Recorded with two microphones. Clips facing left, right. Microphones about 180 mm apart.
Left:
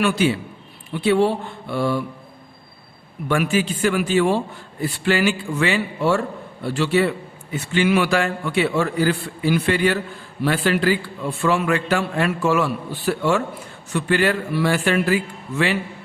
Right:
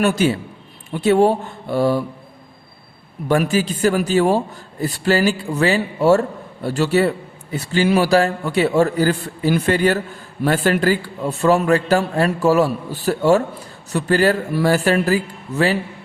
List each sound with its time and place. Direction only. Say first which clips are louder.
0.0 s speech: right 2 dB; 45° right (ahead or behind)
3.2 s a man's voice: right 3 dB; 40° right (ahead or behind)